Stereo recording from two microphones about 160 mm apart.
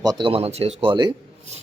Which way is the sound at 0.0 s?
25° right (ahead or behind).